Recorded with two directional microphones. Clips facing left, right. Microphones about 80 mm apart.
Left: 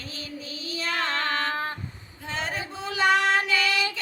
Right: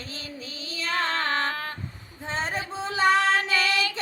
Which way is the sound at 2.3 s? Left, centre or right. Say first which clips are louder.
Right 2 dB; right.